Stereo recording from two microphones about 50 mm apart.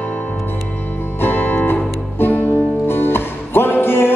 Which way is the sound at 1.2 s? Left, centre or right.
Left.